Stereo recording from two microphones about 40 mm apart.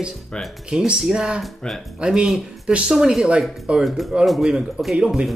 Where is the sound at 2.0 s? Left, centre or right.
Right.